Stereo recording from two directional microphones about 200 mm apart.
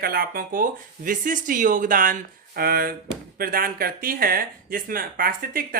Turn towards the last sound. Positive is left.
turn(degrees=-45)  # may be behind; listen again after turning